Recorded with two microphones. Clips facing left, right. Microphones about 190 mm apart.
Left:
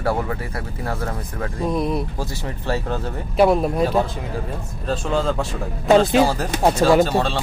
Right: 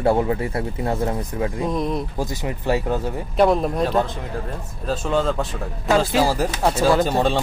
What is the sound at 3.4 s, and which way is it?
Speech, 5° left (ahead or behind).